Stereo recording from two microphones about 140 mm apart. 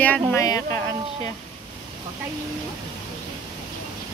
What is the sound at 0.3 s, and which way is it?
Speech, 25° left (ahead or behind).